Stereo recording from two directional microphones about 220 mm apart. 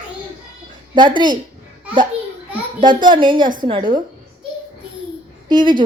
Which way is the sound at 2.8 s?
20° right (ahead or behind).